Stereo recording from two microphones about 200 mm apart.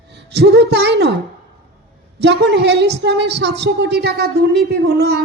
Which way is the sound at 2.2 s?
60° right (ahead or behind).